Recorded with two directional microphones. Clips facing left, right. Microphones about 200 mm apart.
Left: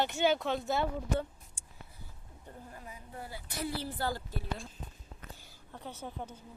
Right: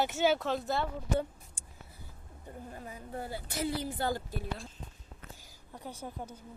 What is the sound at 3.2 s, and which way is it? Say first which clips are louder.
Speech: right 3 dB; 25° right (ahead or behind).